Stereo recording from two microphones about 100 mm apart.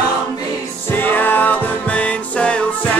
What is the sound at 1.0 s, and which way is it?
Music, 20° left (ahead or behind).